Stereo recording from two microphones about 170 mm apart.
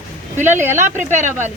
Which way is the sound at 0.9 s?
45° right (ahead or behind).